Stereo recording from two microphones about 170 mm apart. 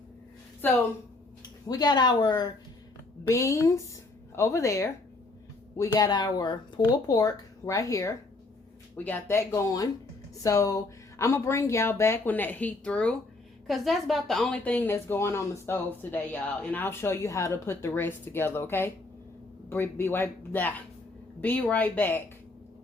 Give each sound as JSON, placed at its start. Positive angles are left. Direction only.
{"t": 0.6, "sound": "speech", "side_deg": 10}
{"t": 1.6, "sound": "speech", "side_deg": 25}